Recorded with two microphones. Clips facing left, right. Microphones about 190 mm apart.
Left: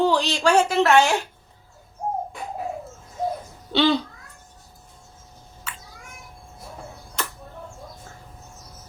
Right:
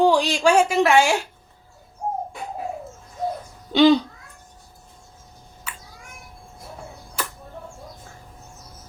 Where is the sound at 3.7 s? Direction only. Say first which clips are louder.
Right 5 dB; 15° right (ahead or behind).